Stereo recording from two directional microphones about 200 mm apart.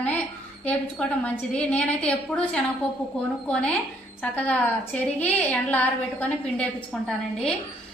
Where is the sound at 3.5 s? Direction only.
5° left (ahead or behind).